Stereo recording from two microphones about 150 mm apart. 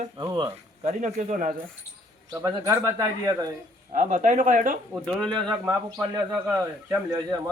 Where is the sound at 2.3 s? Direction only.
20° right (ahead or behind).